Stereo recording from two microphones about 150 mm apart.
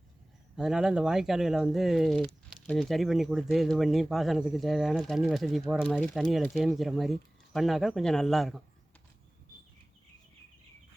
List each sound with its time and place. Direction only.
0.5 s speech: 5° right (ahead or behind)